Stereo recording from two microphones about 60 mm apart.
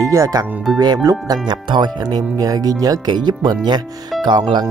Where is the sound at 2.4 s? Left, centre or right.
Right.